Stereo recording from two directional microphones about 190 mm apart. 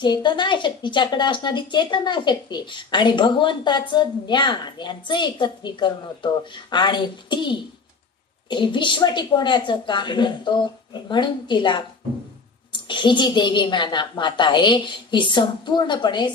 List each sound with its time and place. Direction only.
0.0 s a woman's voice: 25° left (ahead or behind)